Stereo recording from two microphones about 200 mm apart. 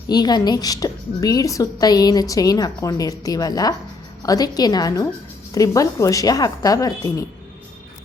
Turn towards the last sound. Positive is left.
turn(degrees=15)  # may be behind; listen again after turning